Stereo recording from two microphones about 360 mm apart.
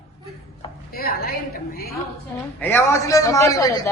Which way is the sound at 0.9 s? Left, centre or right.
Left.